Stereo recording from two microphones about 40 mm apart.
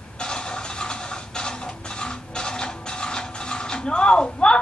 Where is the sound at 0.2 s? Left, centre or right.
Left.